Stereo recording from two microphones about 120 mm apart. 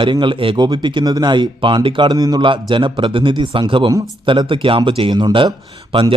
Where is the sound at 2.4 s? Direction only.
45° right (ahead or behind).